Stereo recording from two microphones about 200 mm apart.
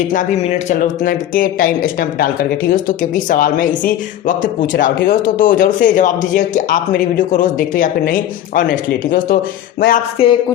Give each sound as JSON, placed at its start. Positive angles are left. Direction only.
{"t": 0.1, "sound": "speech", "side_deg": 40}
{"t": 4.6, "sound": "speech", "side_deg": 65}
{"t": 5.0, "sound": "speech", "side_deg": 45}
{"t": 10.2, "sound": "a woman's voice", "side_deg": 30}